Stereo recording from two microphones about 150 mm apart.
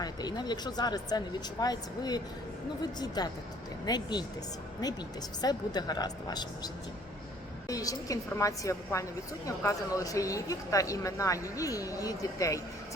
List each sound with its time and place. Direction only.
0.0 s speech: 25° left (ahead or behind)
5.4 s speech: 25° left (ahead or behind)
7.7 s speech: 25° left (ahead or behind)